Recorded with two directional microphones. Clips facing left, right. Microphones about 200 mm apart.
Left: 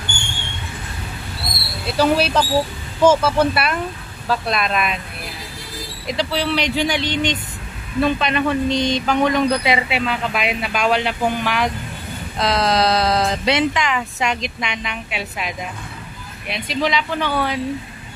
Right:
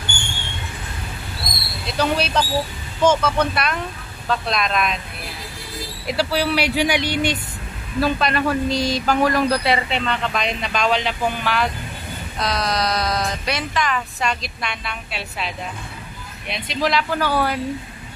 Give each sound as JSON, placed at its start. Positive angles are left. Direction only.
{"t": 1.9, "sound": "speech", "side_deg": 5}
{"t": 6.0, "sound": "speech", "side_deg": -10}
{"t": 12.4, "sound": "speech", "side_deg": 25}
{"t": 16.4, "sound": "speech", "side_deg": 0}